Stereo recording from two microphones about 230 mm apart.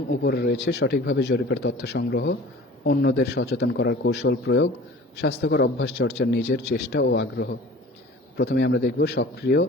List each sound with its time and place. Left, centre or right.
0.1 s speech: left